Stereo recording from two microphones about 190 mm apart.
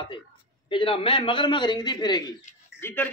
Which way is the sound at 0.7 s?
30° left (ahead or behind).